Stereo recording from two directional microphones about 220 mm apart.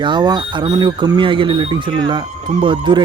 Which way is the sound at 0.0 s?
20° right (ahead or behind).